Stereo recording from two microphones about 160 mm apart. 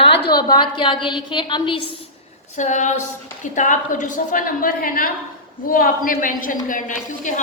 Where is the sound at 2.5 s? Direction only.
50° left (ahead or behind).